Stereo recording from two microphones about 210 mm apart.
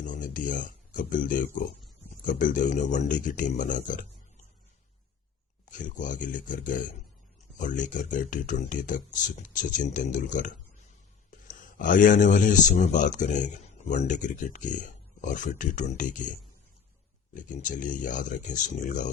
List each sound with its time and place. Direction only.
0.0 s speech: 40° left (ahead or behind)
5.7 s speech: 35° left (ahead or behind)
17.3 s speech: 40° left (ahead or behind)